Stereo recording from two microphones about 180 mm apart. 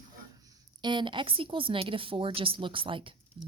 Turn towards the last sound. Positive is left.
turn(degrees=-30)  # may be behind; listen again after turning